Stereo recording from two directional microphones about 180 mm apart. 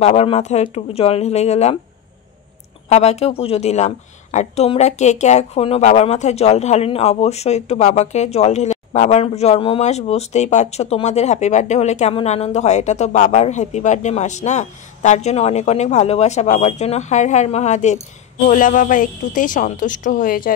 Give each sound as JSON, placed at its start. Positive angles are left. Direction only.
{"t": 0.0, "sound": "a woman's voice", "side_deg": 35}
{"t": 2.9, "sound": "a woman's voice", "side_deg": 35}